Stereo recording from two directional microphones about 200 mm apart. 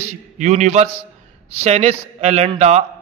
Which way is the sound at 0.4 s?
35° right (ahead or behind).